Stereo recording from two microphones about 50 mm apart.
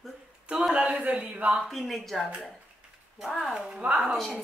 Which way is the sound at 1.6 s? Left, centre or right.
Centre.